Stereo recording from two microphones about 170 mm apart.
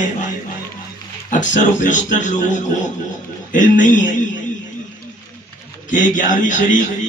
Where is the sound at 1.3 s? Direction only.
50° left (ahead or behind).